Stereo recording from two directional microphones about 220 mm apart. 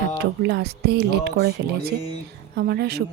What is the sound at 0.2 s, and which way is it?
Speech, 50° right (ahead or behind).